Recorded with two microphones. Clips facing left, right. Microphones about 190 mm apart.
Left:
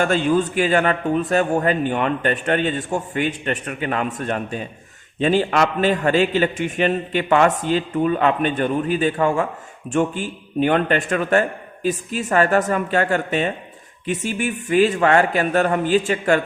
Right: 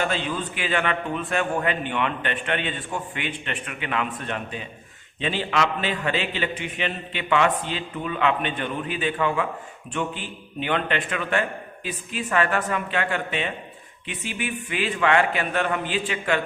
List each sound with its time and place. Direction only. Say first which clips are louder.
0.0 s a man's voice: left 8 dB; 45° left (ahead or behind)